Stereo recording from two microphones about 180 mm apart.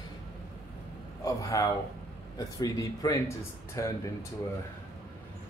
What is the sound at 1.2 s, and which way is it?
Speech, 20° left (ahead or behind).